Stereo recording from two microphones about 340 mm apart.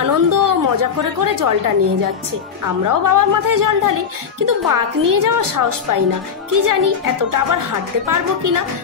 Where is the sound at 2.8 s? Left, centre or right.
Right.